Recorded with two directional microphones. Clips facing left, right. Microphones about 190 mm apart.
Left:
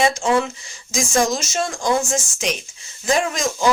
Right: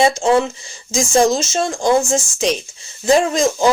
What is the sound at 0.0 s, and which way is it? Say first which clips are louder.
Speech: right 4 dB; 30° right (ahead or behind).